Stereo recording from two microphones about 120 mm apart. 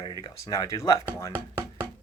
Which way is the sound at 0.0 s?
45° left (ahead or behind).